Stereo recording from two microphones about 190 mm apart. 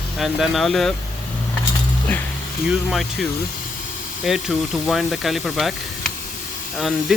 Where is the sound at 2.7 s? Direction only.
Centre (ahead or behind).